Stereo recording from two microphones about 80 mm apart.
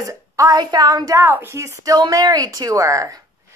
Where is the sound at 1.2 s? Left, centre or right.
Right.